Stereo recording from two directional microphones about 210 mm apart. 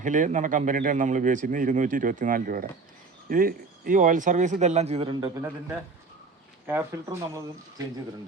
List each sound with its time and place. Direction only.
0.0 s speech: 35° right (ahead or behind); by 7.4 s 15° right (ahead or behind)